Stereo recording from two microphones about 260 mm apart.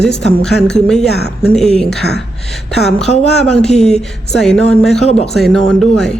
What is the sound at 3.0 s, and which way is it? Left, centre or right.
Speech, left.